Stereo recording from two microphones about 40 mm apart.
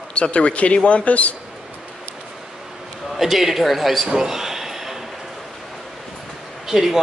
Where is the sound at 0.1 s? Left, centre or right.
Left.